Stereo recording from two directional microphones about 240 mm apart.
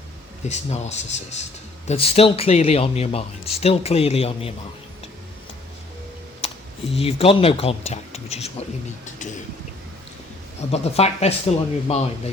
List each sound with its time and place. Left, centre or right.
0.4 s speech: left
6.9 s speech: left
10.7 s speech: left